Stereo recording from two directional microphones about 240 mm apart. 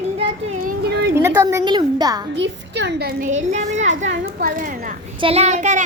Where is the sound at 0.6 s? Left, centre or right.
Right.